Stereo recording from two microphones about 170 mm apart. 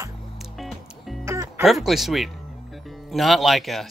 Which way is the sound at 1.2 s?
15° right (ahead or behind).